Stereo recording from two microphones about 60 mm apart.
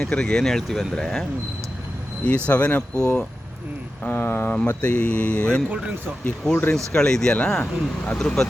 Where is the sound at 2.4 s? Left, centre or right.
Left.